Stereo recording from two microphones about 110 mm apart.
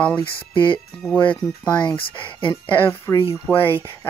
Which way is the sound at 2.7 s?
15° left (ahead or behind).